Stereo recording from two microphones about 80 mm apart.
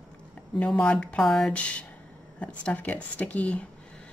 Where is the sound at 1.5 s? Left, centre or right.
Centre.